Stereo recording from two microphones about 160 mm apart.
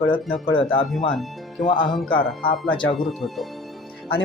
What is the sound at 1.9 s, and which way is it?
Speech, centre (ahead or behind).